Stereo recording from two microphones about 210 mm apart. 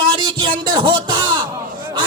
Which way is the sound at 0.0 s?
25° right (ahead or behind).